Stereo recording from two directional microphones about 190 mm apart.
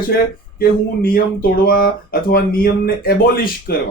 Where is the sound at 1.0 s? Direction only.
50° left (ahead or behind).